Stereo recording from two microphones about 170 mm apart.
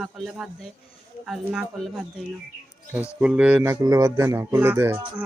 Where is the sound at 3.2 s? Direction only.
5° right (ahead or behind).